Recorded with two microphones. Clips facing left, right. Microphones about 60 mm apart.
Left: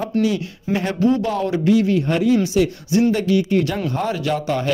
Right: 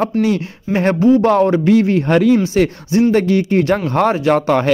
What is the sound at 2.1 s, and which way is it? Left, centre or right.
Speech, right.